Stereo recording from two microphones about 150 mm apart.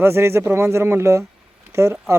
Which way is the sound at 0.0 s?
15° right (ahead or behind).